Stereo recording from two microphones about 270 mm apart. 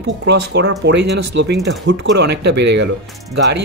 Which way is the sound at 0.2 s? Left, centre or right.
Right.